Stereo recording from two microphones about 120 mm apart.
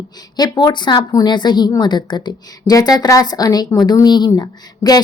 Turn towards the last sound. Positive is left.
turn(degrees=35)  # may be behind; listen again after turning